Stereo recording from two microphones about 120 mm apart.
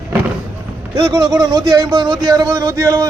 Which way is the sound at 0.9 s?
35° right (ahead or behind).